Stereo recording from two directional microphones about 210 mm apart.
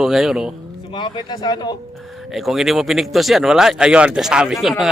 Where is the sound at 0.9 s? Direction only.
20° left (ahead or behind).